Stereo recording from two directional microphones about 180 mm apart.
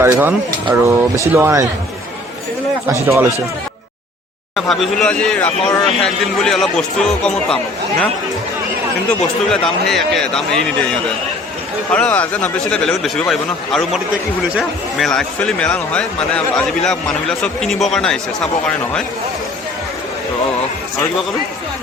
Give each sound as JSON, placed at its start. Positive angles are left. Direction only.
{"t": 0.0, "sound": "speech", "side_deg": -10}
{"t": 2.9, "sound": "speech", "side_deg": -15}
{"t": 4.5, "sound": "a man's voice", "side_deg": 0}
{"t": 9.0, "sound": "a man's voice", "side_deg": 0}
{"t": 11.9, "sound": "a man's voice", "side_deg": 5}